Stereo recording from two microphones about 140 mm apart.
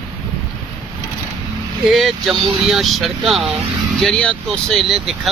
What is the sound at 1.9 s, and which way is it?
Speech, centre (ahead or behind).